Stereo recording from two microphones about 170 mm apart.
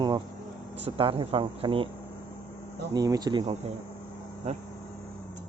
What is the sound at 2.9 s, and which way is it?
Speech, 20° right (ahead or behind).